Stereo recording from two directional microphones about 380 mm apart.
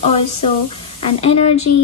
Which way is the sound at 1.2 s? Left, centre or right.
Centre.